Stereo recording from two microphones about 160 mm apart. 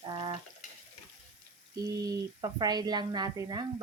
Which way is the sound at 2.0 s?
25° right (ahead or behind).